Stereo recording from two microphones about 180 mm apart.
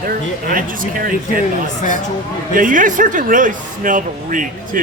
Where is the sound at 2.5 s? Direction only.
45° right (ahead or behind).